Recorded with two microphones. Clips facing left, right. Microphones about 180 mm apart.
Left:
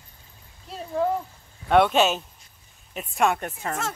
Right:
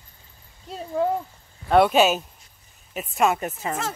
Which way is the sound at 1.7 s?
5° right (ahead or behind).